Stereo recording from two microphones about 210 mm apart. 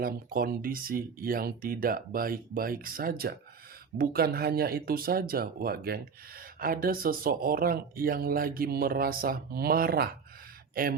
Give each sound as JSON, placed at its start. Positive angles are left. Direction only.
{"t": 0.0, "sound": "speech", "side_deg": -45}